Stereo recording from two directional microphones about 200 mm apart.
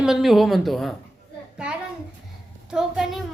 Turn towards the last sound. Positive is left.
turn(degrees=0)  # may be behind; listen again after turning